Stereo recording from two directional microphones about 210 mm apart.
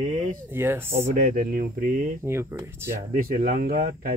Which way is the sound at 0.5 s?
10° right (ahead or behind).